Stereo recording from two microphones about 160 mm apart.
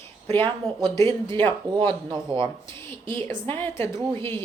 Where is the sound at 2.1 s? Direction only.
30° right (ahead or behind).